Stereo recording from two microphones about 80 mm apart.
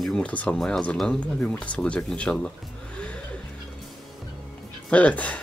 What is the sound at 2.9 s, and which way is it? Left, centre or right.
Music, centre.